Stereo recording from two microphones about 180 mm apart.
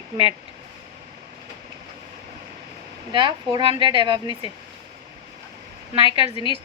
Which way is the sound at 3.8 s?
25° right (ahead or behind).